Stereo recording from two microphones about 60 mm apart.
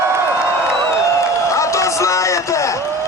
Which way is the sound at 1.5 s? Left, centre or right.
Left.